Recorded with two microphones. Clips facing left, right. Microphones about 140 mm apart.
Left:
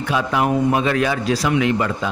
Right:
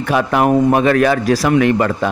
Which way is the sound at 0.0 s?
55° right (ahead or behind).